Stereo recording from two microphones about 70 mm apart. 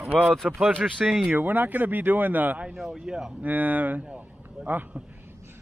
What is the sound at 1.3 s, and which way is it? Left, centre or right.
Speech, right.